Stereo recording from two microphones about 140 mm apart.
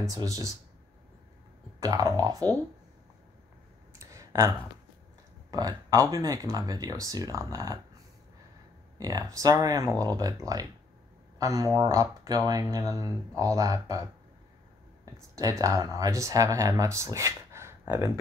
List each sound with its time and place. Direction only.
0.0 s speech: 25° right (ahead or behind)
1.8 s speech: 25° right (ahead or behind)
4.0 s clicking: 25° right (ahead or behind)
5.5 s speech: 25° right (ahead or behind)
8.9 s speech: 25° right (ahead or behind)
15.3 s speech: 25° right (ahead or behind)